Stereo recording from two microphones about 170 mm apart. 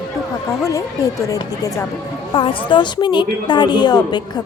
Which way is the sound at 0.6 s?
20° left (ahead or behind).